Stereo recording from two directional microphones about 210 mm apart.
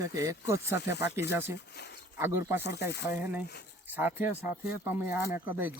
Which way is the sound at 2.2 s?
10° right (ahead or behind).